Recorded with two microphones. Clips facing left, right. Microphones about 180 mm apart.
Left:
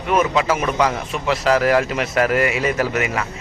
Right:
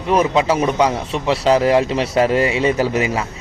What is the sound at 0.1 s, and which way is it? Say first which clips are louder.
A man's voice: right 2 dB; 30° right (ahead or behind).